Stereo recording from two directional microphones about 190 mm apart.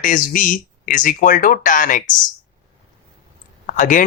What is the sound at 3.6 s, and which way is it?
Speech, 45° left (ahead or behind).